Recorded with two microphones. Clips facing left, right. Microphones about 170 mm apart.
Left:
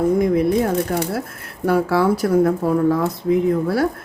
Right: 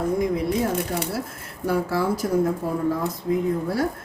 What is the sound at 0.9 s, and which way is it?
Speech, 60° left (ahead or behind).